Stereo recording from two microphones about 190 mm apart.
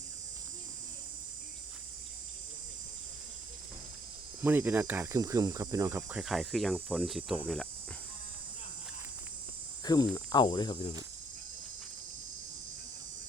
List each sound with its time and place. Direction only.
4.4 s speech: 10° right (ahead or behind)
9.8 s cricket: 20° left (ahead or behind)